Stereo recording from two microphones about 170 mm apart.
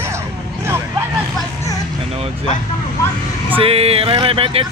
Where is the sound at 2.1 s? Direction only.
35° right (ahead or behind).